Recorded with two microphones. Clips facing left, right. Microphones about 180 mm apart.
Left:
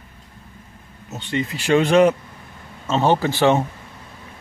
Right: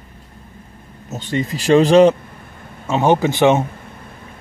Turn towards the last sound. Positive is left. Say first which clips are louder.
# right 3 dB
turn(degrees=-20)  # may be behind; listen again after turning